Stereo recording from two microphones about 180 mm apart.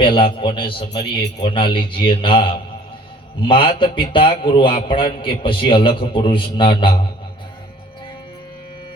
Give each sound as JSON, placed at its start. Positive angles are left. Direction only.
{"t": 0.2, "sound": "a man's voice", "side_deg": 30}